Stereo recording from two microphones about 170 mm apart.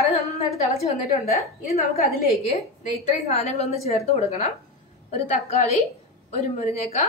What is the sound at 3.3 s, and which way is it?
A woman's voice, 40° left (ahead or behind).